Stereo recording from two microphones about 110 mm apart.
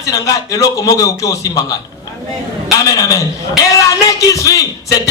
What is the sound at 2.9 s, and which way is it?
A man's voice, 35° left (ahead or behind).